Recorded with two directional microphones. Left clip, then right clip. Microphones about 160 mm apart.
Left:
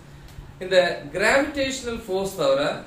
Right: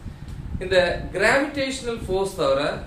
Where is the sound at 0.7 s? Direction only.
15° right (ahead or behind).